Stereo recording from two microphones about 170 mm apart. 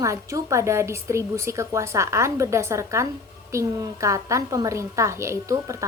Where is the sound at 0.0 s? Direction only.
20° right (ahead or behind).